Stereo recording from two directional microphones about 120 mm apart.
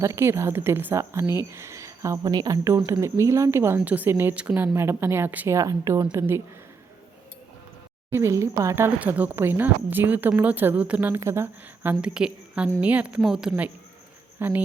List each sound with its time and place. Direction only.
0.0 s a woman's voice: 20° right (ahead or behind)
5.5 s speech: 30° right (ahead or behind)
8.1 s a woman's voice: 25° right (ahead or behind); by 13.7 s 5° right (ahead or behind)
14.3 s speech: 15° right (ahead or behind)